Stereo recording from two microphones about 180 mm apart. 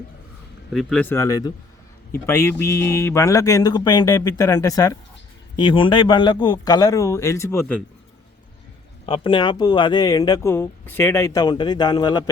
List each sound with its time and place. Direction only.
0.7 s speech: centre (ahead or behind)
9.0 s speech: 30° left (ahead or behind)